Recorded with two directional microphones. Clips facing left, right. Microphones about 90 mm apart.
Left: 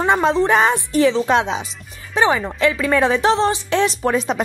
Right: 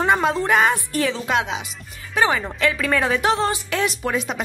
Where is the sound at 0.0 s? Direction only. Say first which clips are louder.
Left 3 dB; 25° left (ahead or behind).